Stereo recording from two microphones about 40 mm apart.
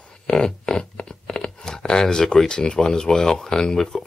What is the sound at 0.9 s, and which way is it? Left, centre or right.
Speech, left.